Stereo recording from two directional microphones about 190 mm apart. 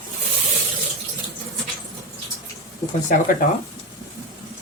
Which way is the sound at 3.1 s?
45° left (ahead or behind).